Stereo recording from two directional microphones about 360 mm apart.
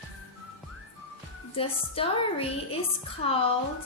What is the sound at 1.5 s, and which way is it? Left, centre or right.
Speech, centre.